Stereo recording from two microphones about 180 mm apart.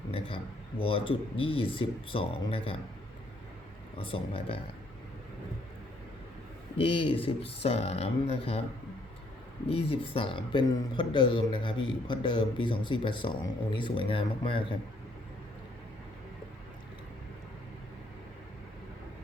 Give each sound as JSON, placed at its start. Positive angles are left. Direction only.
{"t": 0.1, "sound": "speech", "side_deg": 30}
{"t": 3.9, "sound": "speech", "side_deg": 30}
{"t": 6.7, "sound": "speech", "side_deg": 30}
{"t": 9.6, "sound": "speech", "side_deg": 35}